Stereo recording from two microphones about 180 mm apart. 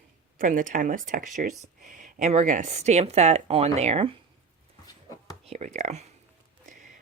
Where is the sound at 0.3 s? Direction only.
45° right (ahead or behind).